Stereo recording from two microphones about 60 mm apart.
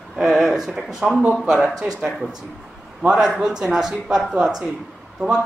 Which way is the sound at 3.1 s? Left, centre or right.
Centre.